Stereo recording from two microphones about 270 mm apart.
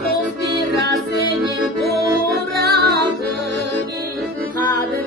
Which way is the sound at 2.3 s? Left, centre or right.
Right.